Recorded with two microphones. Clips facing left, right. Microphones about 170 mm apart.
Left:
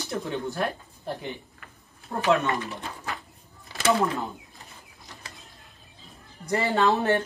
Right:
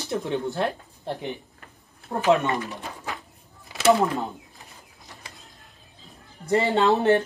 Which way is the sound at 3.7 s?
15° right (ahead or behind).